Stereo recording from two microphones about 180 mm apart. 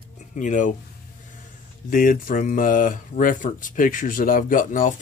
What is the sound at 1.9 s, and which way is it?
Speech, 50° left (ahead or behind).